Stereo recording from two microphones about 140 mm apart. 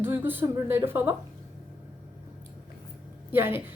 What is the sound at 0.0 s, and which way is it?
A woman's voice, 15° right (ahead or behind).